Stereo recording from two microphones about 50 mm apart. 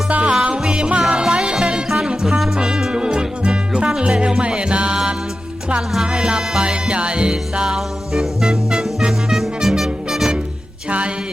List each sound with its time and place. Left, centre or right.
0.1 s music: right
2.2 s music: centre
2.6 s music: centre
6.1 s music: centre
10.8 s a sound: right